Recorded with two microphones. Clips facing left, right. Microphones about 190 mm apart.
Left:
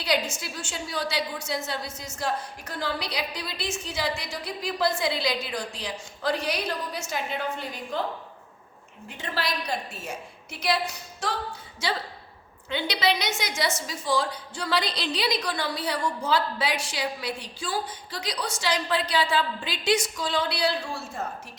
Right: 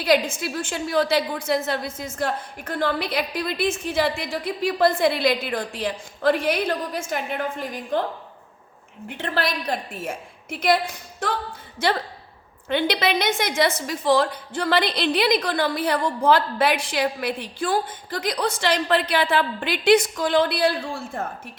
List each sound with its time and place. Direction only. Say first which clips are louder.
0.0 s a woman's voice: right 7 dB; 55° right (ahead or behind)
9.0 s a woman's voice: right 5 dB; 60° right (ahead or behind)